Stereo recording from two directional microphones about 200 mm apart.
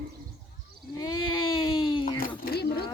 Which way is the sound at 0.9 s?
20° left (ahead or behind).